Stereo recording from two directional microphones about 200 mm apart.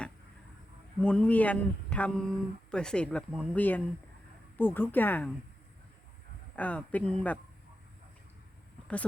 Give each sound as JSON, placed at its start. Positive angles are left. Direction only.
{"t": 1.0, "sound": "speech", "side_deg": 5}
{"t": 6.6, "sound": "speech", "side_deg": 5}